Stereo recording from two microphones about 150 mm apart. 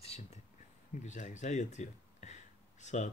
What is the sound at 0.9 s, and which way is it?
Speech, 55° left (ahead or behind).